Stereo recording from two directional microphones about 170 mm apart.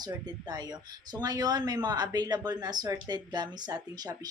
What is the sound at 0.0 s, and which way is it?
Speech, 25° right (ahead or behind).